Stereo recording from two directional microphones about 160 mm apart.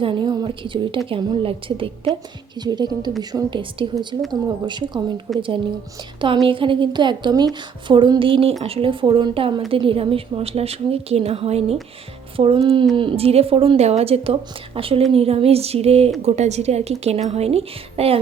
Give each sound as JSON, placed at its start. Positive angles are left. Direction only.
{"t": 0.0, "sound": "a woman's voice", "side_deg": -30}